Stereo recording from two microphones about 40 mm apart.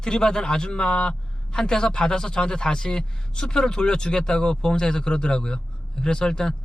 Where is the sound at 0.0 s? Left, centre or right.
Centre.